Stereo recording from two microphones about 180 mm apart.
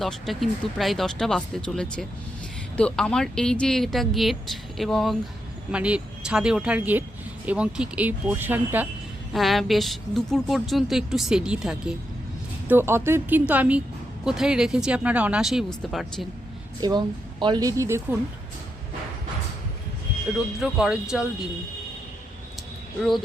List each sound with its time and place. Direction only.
0.0 s a woman's voice: centre (ahead or behind)
9.3 s a woman's voice: centre (ahead or behind)
16.8 s speech: 20° right (ahead or behind)
20.6 s a woman's voice: 5° right (ahead or behind)